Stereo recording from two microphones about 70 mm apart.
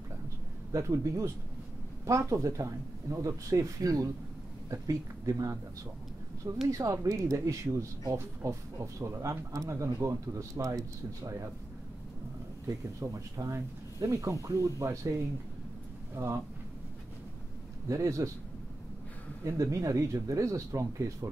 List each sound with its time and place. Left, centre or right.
0.7 s speech: right
6.7 s speech: right
12.6 s speech: right
17.8 s speech: right
19.4 s speech: right